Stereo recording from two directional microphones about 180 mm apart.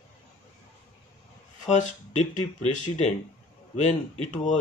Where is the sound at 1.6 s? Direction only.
40° left (ahead or behind).